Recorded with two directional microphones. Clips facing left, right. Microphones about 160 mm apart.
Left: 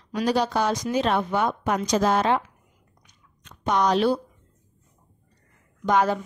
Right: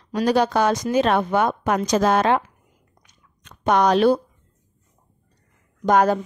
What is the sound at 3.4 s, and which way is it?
Speech, 60° right (ahead or behind).